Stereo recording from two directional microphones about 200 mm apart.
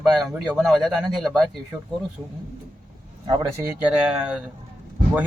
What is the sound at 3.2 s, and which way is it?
Speech, 20° right (ahead or behind).